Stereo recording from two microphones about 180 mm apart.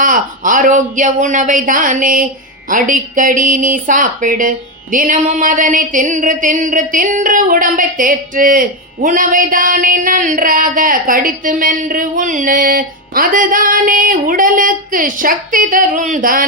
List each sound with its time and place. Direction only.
0.0 s a man's voice: 45° right (ahead or behind)